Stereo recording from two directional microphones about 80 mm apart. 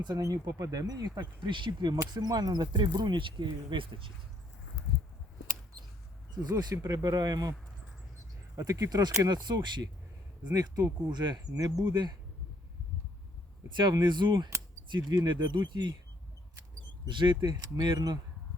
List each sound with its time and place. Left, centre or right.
0.2 s speech: right
2.0 s speech: right
6.5 s speech: right
8.5 s speech: right
10.4 s speech: right
11.5 s speech: right
11.9 s speech: right
13.7 s speech: right
15.1 s speech: right
17.1 s speech: right